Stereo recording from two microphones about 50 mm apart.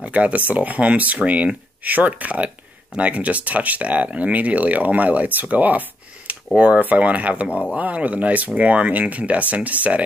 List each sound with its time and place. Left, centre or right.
0.0 s speech: right
6.5 s speech: right